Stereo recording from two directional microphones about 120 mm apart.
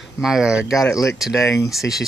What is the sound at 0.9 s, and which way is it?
Speech, 25° left (ahead or behind).